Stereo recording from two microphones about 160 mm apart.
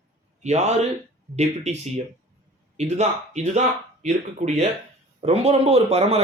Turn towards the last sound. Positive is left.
turn(degrees=-40)  # may be behind; listen again after turning